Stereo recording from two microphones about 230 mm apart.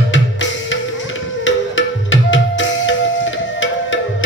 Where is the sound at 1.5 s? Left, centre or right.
Left.